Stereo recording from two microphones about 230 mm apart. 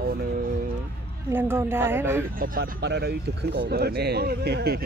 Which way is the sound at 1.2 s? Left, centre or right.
Centre.